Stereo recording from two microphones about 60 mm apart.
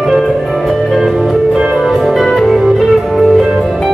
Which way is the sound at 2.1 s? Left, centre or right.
Centre.